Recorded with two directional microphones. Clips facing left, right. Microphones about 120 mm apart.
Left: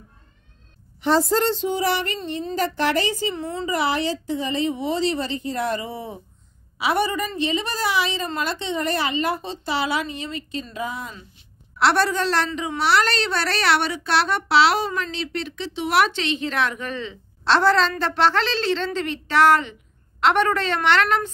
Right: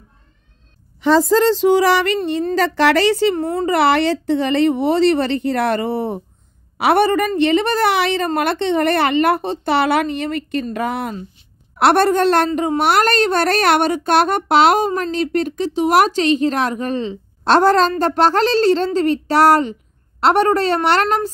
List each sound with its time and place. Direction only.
1.5 s a woman's voice: 90° right; by 21.3 s 40° right (ahead or behind)